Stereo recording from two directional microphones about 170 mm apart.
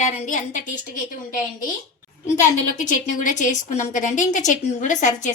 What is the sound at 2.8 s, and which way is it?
A woman's voice, 50° left (ahead or behind).